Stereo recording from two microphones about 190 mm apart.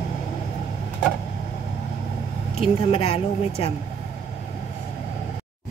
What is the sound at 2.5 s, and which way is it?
Speech, 30° left (ahead or behind).